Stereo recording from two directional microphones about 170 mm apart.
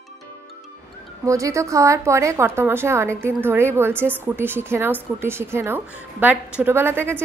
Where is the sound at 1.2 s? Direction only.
20° right (ahead or behind).